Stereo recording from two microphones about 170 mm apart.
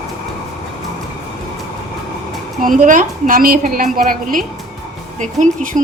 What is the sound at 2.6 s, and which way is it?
A woman's voice, 50° right (ahead or behind).